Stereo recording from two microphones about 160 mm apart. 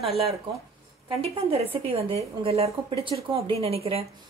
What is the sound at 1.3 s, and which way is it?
Speech, 35° right (ahead or behind).